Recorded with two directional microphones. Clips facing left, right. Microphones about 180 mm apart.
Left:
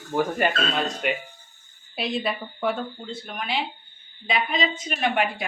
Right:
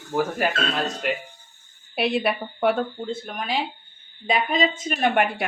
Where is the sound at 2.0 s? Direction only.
65° right (ahead or behind).